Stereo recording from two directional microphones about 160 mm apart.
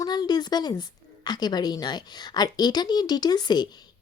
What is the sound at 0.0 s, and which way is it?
A woman's voice, 25° left (ahead or behind).